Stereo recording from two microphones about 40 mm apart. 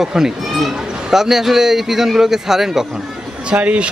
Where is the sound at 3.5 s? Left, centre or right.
Right.